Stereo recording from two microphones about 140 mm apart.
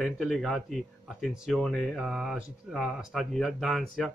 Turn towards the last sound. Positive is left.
turn(degrees=0)  # may be behind; listen again after turning